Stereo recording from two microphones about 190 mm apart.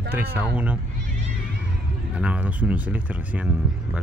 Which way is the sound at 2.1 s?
5° right (ahead or behind).